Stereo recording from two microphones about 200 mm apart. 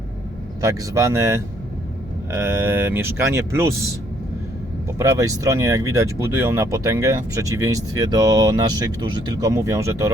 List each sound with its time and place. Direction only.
0.6 s speech: 15° right (ahead or behind)
4.9 s speech: 15° right (ahead or behind)